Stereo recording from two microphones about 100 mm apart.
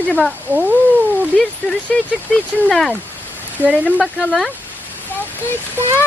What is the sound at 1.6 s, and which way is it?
Speech, 15° left (ahead or behind).